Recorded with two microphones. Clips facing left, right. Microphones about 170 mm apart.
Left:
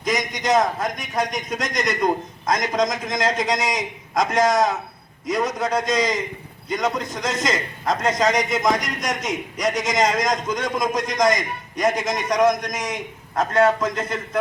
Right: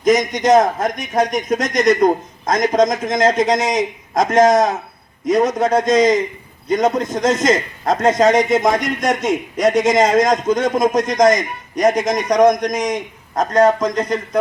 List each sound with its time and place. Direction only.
0.0 s a man's voice: 45° right (ahead or behind)
8.4 s speech: 30° right (ahead or behind)
8.6 s a man's voice: 55° right (ahead or behind)